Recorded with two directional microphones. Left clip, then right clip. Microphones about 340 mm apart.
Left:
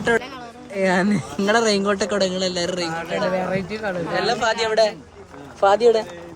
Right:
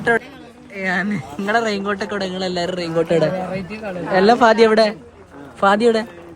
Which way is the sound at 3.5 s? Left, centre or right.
Left.